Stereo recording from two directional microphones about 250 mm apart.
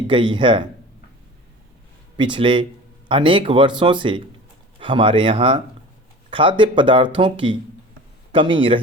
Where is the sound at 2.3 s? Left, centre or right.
Centre.